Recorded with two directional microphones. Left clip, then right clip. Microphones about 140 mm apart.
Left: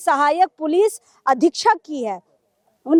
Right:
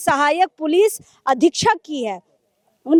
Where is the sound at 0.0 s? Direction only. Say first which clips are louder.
Even; 35° right (ahead or behind).